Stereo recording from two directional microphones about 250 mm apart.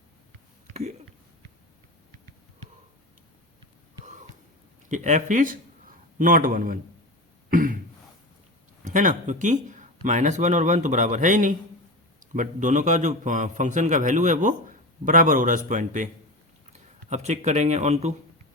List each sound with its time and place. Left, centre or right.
4.9 s a man's voice: right
7.5 s throat clearing: right
8.8 s a man's voice: right
17.1 s speech: right